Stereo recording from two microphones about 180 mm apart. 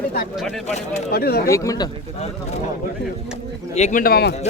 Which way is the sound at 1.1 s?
60° left (ahead or behind).